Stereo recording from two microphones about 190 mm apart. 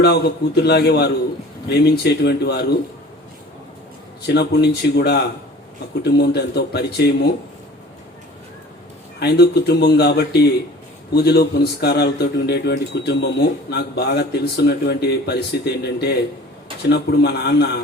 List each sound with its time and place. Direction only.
0.0 s speech: 60° left (ahead or behind)
4.3 s speech: 60° left (ahead or behind)
9.2 s speech: 60° left (ahead or behind)